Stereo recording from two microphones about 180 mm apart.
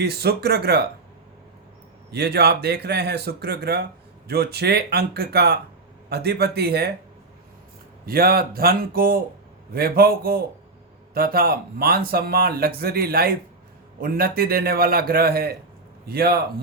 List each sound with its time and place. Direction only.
0.0 s speech: 60° right (ahead or behind)
2.0 s speech: 65° right (ahead or behind)
8.0 s speech: 55° right (ahead or behind)